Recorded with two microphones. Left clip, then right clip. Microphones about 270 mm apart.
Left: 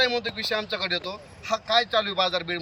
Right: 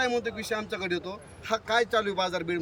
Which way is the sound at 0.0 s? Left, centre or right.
Centre.